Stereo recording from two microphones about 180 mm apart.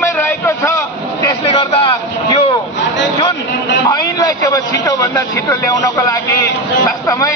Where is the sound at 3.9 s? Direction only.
20° left (ahead or behind).